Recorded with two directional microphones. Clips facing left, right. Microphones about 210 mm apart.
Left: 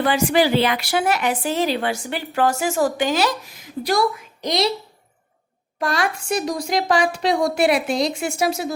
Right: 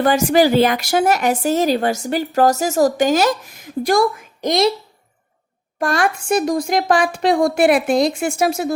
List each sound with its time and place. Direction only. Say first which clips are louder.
0.0 s speech: right 4 dB; 45° right (ahead or behind)
5.8 s speech: right 4 dB; 50° right (ahead or behind)